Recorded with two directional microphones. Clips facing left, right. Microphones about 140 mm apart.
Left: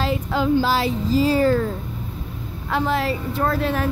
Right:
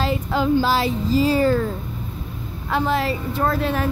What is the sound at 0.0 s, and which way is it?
Speech, 35° right (ahead or behind).